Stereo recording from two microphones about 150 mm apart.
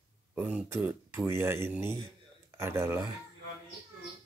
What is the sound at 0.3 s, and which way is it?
Speech, 10° right (ahead or behind).